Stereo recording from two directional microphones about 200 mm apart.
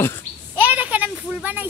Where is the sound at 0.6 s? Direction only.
10° right (ahead or behind).